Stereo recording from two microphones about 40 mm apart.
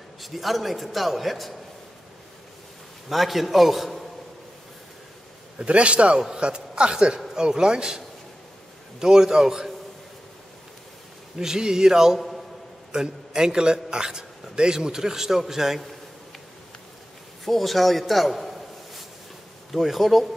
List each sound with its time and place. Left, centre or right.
0.2 s a man's voice: centre
3.1 s a man's voice: centre
5.6 s a man's voice: right
9.0 s a man's voice: centre
11.3 s a man's voice: centre
17.5 s a man's voice: centre